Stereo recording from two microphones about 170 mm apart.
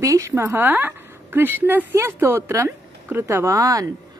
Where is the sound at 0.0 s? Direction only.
20° right (ahead or behind).